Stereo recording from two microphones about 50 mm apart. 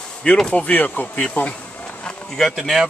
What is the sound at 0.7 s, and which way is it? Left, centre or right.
Speech, left.